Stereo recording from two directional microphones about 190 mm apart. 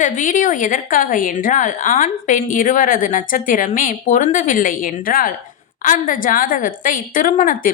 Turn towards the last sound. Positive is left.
turn(degrees=45)  # may be behind; listen again after turning